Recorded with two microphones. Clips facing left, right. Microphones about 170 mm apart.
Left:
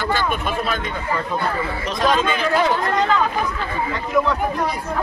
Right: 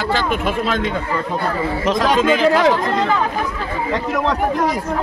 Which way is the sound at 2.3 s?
90° right.